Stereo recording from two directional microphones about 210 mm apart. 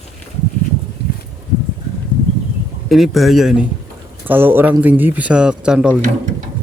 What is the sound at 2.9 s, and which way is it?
A man's voice, centre (ahead or behind).